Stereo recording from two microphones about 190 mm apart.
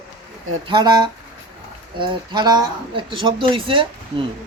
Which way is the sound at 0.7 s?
20° right (ahead or behind).